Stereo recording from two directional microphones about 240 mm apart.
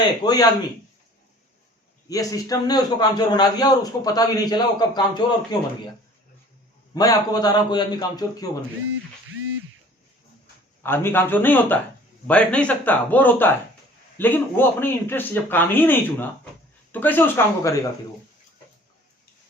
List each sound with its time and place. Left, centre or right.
0.0 s a man's voice: centre
2.0 s a man's voice: centre
6.9 s a man's voice: centre
10.8 s a man's voice: centre